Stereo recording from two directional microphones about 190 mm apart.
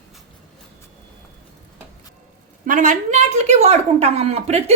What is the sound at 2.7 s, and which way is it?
A woman's voice, 40° right (ahead or behind).